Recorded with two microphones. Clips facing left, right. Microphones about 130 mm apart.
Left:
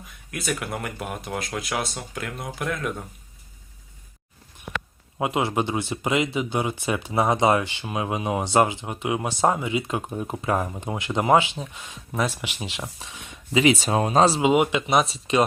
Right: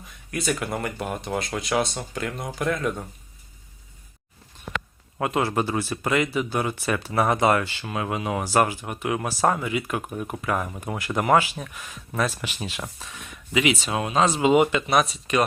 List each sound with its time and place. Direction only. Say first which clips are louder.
0.3 s speech: right 2 dB; centre (ahead or behind)
5.2 s speech: even; 15° left (ahead or behind); by 14.4 s 35° left (ahead or behind)
14.4 s speech: right 1 dB; 10° left (ahead or behind); by 15.4 s 30° left (ahead or behind)